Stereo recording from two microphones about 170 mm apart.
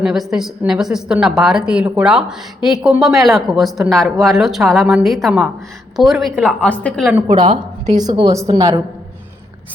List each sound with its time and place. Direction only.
0.0 s a woman's voice: 5° right (ahead or behind)
7.5 s a woman's voice: 25° right (ahead or behind)